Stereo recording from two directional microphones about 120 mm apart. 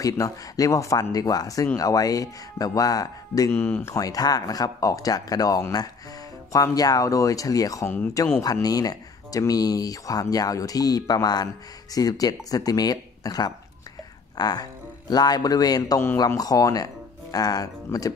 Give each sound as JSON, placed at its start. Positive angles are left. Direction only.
{"t": 0.0, "sound": "speech", "side_deg": 25}
{"t": 3.5, "sound": "speech", "side_deg": 20}